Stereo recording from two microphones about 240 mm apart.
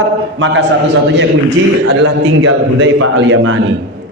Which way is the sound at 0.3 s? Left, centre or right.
Right.